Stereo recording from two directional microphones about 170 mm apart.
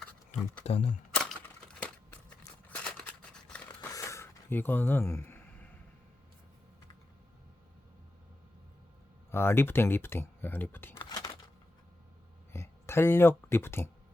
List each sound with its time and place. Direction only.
0.6 s speech: 40° left (ahead or behind)
1.1 s typewriter: 5° left (ahead or behind)
2.6 s scissors: 10° left (ahead or behind)
3.8 s a sound: 20° left (ahead or behind)
9.3 s speech: 15° left (ahead or behind)
10.9 s a sound: 25° left (ahead or behind)
12.5 s speech: 15° left (ahead or behind)